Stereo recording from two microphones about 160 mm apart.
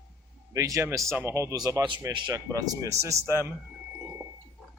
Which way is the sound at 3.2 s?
15° left (ahead or behind).